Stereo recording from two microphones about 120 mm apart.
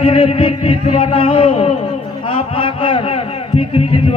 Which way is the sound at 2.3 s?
50° left (ahead or behind).